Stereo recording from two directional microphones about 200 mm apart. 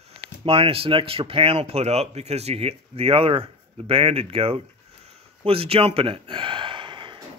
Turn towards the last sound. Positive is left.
turn(degrees=-25)  # may be behind; listen again after turning